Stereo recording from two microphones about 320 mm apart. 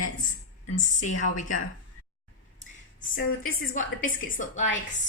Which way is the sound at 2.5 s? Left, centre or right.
Left.